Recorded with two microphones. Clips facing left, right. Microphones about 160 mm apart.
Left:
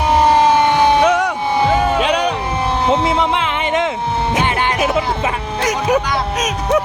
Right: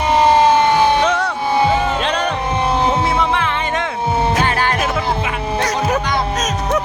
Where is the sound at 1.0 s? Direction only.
15° left (ahead or behind).